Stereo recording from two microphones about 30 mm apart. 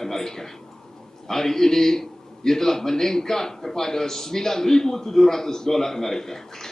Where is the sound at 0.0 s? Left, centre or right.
Centre.